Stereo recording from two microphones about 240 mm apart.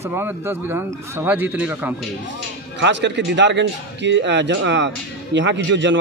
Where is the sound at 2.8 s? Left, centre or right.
Right.